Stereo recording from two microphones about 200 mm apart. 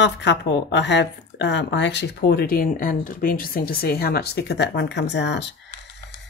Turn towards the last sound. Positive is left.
turn(degrees=60)  # may be behind; listen again after turning